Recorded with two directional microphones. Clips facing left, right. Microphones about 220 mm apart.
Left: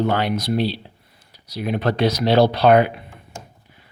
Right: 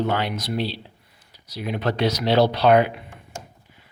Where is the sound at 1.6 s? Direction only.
50° left (ahead or behind).